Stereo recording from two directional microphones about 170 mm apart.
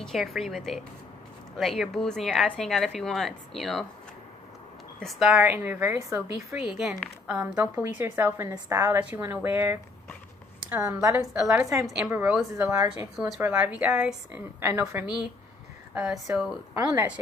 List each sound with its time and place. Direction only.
0.0 s a woman's voice: centre (ahead or behind)
5.0 s a woman's voice: 5° right (ahead or behind)
6.5 s a woman's voice: 5° right (ahead or behind)
11.8 s a woman's voice: 5° right (ahead or behind)
16.7 s a woman's voice: 15° right (ahead or behind)